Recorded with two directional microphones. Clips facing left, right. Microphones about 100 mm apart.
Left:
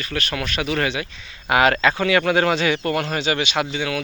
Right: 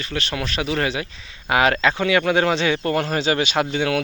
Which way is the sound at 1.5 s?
20° right (ahead or behind).